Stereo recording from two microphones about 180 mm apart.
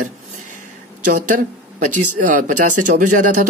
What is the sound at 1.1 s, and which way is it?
Speech, 45° right (ahead or behind).